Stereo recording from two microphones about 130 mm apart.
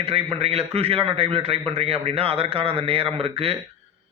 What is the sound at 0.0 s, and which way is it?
A man's voice, 50° right (ahead or behind).